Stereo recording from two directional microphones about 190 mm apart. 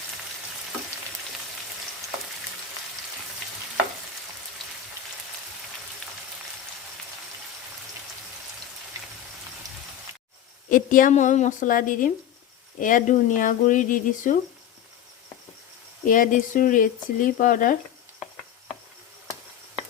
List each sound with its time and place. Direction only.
10.7 s speech: 45° left (ahead or behind)
16.0 s speech: 45° left (ahead or behind)